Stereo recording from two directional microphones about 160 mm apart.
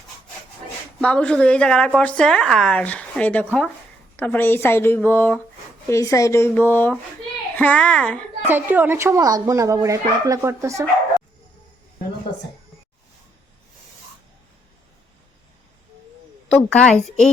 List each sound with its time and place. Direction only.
1.0 s speech: 5° left (ahead or behind)
8.4 s a woman's voice: 10° right (ahead or behind)
16.5 s a woman's voice: 5° left (ahead or behind)